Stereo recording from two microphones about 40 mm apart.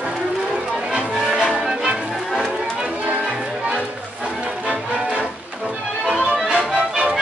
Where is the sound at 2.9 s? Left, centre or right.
Right.